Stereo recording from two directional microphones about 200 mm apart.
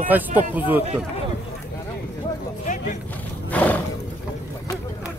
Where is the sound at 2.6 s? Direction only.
40° left (ahead or behind).